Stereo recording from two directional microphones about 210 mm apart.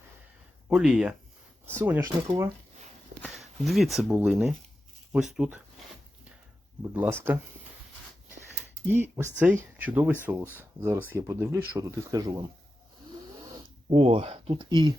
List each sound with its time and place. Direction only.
0.7 s speech: 5° right (ahead or behind)
2.2 s speech: 20° right (ahead or behind)
3.2 s speech: centre (ahead or behind)
6.9 s speech: 10° right (ahead or behind)
8.9 s speech: 10° right (ahead or behind)
13.5 s speech: 25° right (ahead or behind)